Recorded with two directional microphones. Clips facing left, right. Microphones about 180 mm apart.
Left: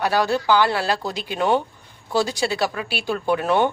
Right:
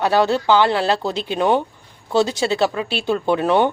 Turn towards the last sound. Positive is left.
turn(degrees=-15)  # may be behind; listen again after turning